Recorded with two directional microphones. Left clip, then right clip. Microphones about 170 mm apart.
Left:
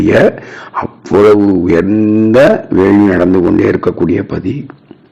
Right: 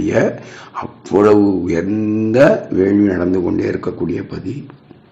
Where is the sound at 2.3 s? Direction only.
40° left (ahead or behind).